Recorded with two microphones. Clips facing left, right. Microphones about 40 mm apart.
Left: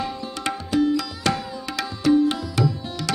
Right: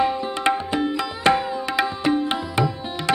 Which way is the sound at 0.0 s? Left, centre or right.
Right.